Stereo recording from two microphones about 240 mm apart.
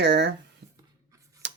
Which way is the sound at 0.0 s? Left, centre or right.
Right.